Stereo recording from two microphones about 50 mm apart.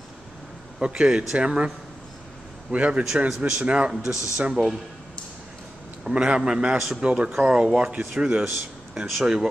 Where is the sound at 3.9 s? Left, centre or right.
Centre.